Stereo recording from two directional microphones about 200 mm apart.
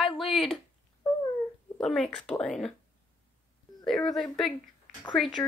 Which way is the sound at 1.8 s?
5° left (ahead or behind).